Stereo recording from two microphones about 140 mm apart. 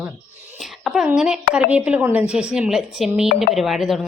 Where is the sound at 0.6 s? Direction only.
5° right (ahead or behind).